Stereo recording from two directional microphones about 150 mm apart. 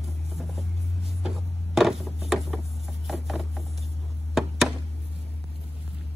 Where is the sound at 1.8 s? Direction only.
Centre (ahead or behind).